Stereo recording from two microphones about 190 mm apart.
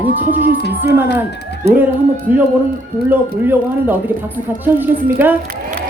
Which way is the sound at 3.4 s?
10° right (ahead or behind).